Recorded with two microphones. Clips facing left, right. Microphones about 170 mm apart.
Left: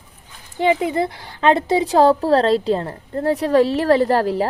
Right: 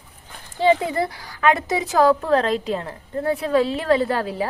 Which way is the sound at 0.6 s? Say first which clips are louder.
Left 1 dB; 20° left (ahead or behind).